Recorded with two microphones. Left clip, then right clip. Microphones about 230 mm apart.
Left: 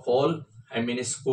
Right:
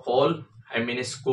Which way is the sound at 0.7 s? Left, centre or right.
Centre.